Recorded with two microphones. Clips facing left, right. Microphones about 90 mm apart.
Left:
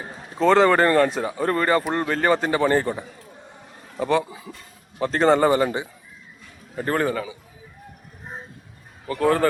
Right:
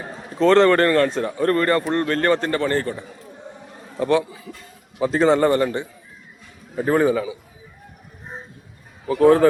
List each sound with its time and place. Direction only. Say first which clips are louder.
0.3 s a man's voice: right 2 dB; 5° left (ahead or behind)
3.9 s a man's voice: right 2 dB; centre (ahead or behind)
4.2 s speech: right 1 dB; 20° left (ahead or behind)
4.9 s a man's voice: right 1 dB; 5° right (ahead or behind)
6.7 s a man's voice: right 5 dB; 5° right (ahead or behind)
9.0 s a man's voice: right 6 dB; 10° right (ahead or behind)